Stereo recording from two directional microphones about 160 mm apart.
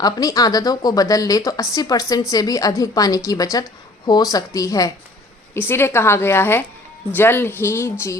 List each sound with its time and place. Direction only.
0.0 s a woman's voice: 25° left (ahead or behind)